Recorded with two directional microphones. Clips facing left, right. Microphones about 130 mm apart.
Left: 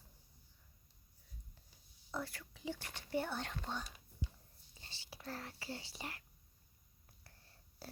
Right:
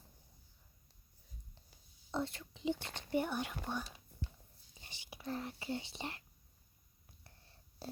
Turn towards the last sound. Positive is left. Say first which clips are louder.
# right 5 dB
turn(degrees=-25)  # may be behind; listen again after turning